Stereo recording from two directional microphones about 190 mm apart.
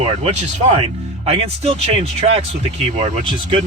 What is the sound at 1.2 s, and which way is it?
Speech, 30° right (ahead or behind).